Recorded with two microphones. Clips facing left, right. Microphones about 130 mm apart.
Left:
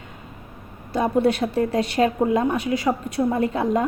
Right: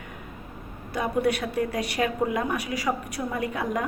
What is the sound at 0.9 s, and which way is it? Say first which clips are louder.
A woman's voice: left 5 dB; 25° left (ahead or behind).